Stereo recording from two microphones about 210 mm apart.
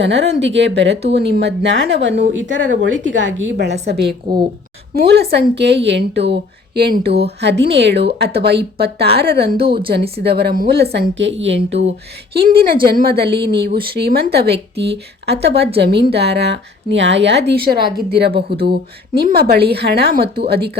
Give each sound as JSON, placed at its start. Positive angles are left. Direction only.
{"t": 0.0, "sound": "a woman's voice", "side_deg": -55}
{"t": 10.9, "sound": "a woman's voice", "side_deg": -60}
{"t": 12.3, "sound": "speech", "side_deg": -45}
{"t": 17.7, "sound": "a woman's voice", "side_deg": -20}
{"t": 18.1, "sound": "speech", "side_deg": -50}